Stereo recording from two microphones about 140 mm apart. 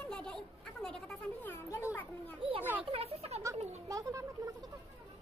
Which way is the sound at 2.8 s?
45° right (ahead or behind).